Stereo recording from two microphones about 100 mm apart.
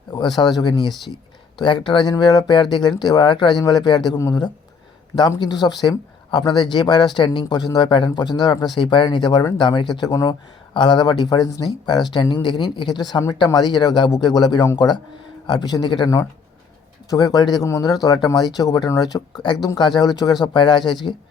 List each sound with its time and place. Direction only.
0.1 s speech: 45° left (ahead or behind)
17.1 s speech: 40° left (ahead or behind)